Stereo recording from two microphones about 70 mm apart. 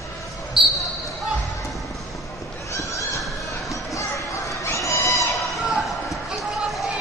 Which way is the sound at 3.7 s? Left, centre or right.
Left.